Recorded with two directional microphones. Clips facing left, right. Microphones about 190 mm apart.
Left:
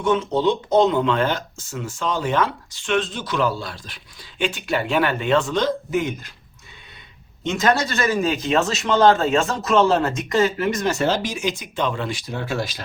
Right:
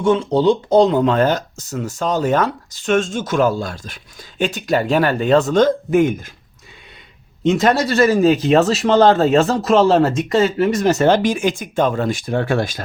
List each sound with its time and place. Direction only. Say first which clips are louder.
0.0 s speech: right 5 dB; 30° right (ahead or behind); by 6.3 s 50° right (ahead or behind)
7.4 s speech: right 5 dB; 35° right (ahead or behind)
10.9 s speech: right 7 dB; 55° right (ahead or behind)